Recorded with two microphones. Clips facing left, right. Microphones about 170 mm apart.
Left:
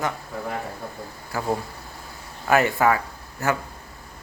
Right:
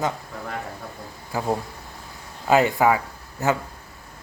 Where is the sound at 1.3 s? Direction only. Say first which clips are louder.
Right 1 dB; 15° right (ahead or behind).